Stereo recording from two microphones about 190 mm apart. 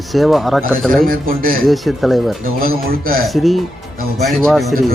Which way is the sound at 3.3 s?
Centre (ahead or behind).